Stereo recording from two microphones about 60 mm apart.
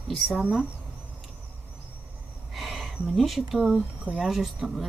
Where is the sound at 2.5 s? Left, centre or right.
Centre.